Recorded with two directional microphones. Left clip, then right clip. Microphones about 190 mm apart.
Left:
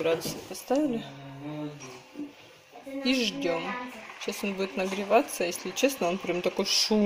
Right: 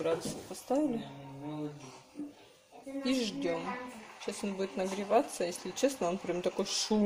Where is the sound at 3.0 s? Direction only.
5° left (ahead or behind).